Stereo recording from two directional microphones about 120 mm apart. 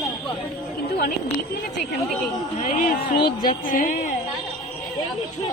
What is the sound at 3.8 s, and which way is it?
Speech, 90° left.